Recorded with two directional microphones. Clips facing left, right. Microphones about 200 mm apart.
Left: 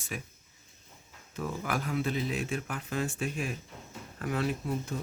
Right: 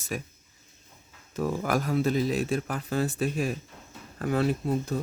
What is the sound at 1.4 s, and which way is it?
Speech, 40° right (ahead or behind).